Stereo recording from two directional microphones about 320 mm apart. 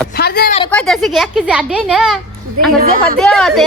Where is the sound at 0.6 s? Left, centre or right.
Centre.